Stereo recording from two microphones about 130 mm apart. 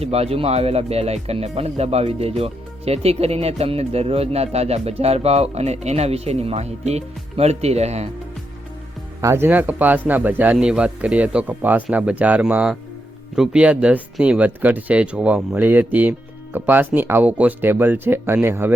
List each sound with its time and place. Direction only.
0.0 s speech: 50° right (ahead or behind)
9.2 s speech: 20° right (ahead or behind)